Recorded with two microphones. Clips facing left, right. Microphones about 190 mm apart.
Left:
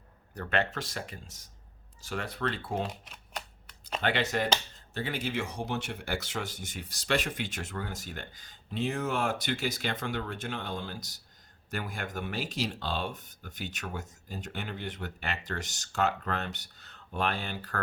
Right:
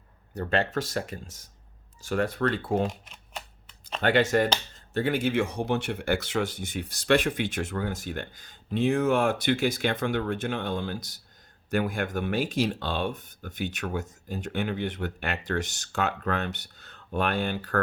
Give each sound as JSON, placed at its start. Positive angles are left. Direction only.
{"t": 0.3, "sound": "speech", "side_deg": -35}
{"t": 4.0, "sound": "speech", "side_deg": -45}